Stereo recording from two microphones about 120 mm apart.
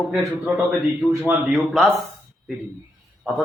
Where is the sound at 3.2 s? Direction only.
5° right (ahead or behind).